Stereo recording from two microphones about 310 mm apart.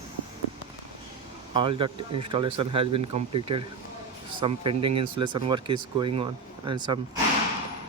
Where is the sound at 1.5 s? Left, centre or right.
Centre.